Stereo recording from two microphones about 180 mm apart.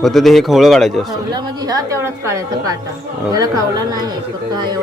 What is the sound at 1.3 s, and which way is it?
A woman's voice, 20° right (ahead or behind).